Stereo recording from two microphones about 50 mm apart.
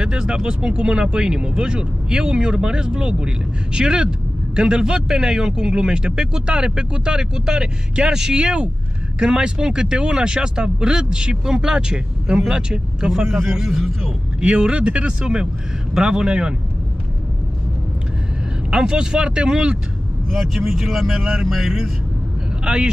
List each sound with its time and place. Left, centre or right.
0.0 s speech: centre
18.7 s speech: centre
20.2 s speech: centre